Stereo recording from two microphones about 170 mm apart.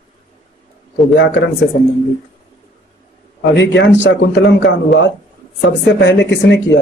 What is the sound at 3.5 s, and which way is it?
Speech, 90° left.